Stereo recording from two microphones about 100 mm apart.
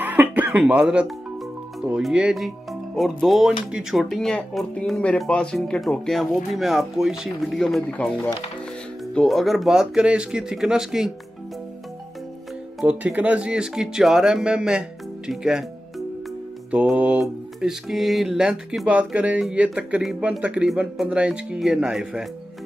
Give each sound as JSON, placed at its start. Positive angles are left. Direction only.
{"t": 0.0, "sound": "a sound", "side_deg": -15}
{"t": 2.0, "sound": "speech", "side_deg": -5}
{"t": 12.8, "sound": "speech", "side_deg": -15}
{"t": 16.8, "sound": "speech", "side_deg": -10}